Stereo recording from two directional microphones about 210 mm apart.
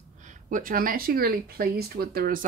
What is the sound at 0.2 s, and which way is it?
Speech, 40° right (ahead or behind).